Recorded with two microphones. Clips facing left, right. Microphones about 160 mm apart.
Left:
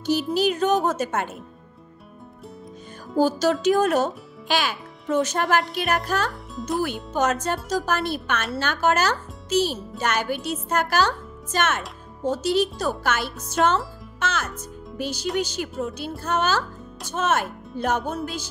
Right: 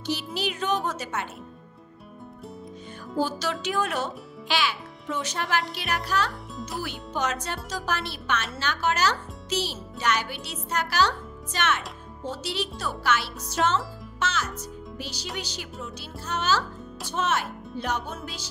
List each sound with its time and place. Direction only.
0.0 s a child's voice: 45° left (ahead or behind)
3.2 s music: 40° left (ahead or behind)
3.6 s a child's voice: 40° left (ahead or behind)